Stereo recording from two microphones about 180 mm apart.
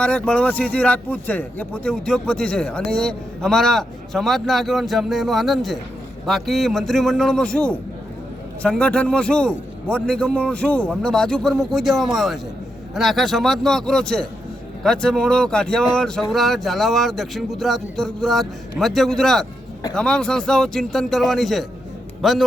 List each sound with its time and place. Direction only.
0.0 s speech: 5° left (ahead or behind)